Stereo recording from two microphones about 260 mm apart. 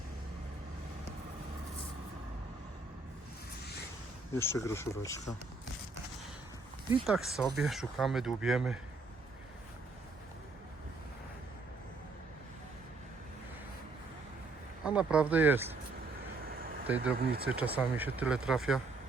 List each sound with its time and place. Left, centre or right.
4.4 s speech: centre
7.0 s speech: centre
14.8 s speech: centre
16.8 s speech: centre
17.2 s speech: right
17.5 s speech: centre